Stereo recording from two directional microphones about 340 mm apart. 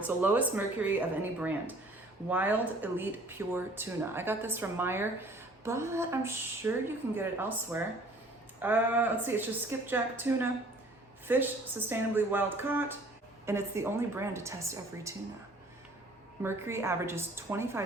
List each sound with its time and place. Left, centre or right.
0.0 s a woman's voice: centre
16.4 s speech: centre